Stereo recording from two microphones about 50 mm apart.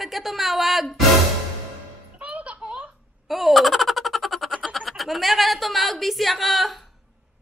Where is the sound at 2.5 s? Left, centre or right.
Centre.